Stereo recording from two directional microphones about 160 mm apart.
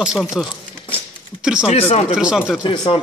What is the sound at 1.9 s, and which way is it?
Speech, 40° left (ahead or behind).